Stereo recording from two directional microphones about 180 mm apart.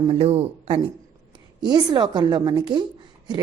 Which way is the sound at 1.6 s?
25° right (ahead or behind).